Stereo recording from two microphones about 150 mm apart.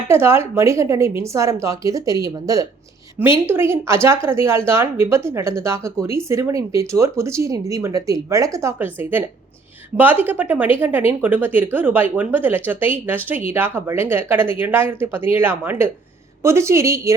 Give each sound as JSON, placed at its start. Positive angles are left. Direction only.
{"t": 0.1, "sound": "a woman's voice", "side_deg": -15}